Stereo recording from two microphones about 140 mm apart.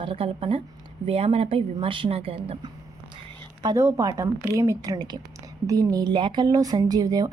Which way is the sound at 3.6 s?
20° right (ahead or behind).